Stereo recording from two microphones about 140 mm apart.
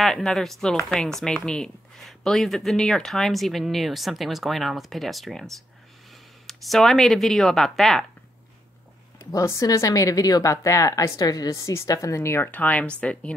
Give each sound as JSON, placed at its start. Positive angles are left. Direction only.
{"t": 0.0, "sound": "speech", "side_deg": 5}
{"t": 9.2, "sound": "speech", "side_deg": 20}